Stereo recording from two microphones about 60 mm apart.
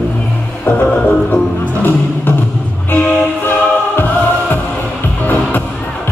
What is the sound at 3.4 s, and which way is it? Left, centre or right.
Music, left.